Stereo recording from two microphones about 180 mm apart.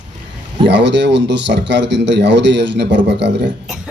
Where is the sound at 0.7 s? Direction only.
75° right (ahead or behind).